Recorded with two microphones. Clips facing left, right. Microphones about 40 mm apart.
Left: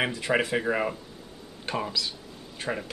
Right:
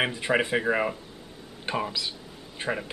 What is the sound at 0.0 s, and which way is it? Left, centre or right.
Speech, centre.